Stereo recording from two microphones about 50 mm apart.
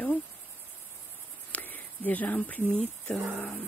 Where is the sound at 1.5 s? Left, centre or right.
Left.